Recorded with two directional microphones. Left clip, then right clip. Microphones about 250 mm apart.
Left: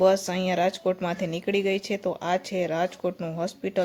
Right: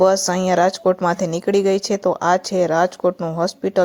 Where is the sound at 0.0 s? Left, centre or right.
Right.